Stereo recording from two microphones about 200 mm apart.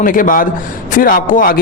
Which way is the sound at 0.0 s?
45° left (ahead or behind).